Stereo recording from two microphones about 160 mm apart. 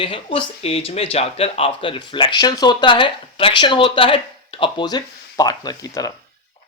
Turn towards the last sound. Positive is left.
turn(degrees=20)  # may be behind; listen again after turning